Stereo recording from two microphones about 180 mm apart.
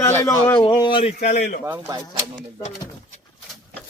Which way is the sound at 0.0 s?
15° left (ahead or behind).